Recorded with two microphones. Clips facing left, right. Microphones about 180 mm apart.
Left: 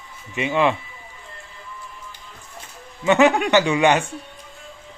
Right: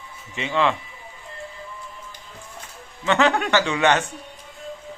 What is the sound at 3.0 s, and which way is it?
Speech, 15° left (ahead or behind).